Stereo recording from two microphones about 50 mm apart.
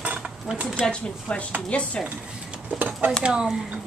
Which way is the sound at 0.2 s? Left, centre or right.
Centre.